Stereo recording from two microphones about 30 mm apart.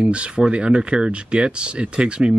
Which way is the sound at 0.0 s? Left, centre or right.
Right.